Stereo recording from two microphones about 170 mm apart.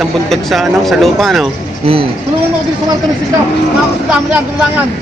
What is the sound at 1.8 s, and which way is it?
Speech, 35° right (ahead or behind).